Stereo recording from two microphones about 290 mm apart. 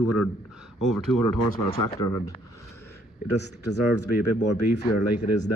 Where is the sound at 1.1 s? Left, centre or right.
Left.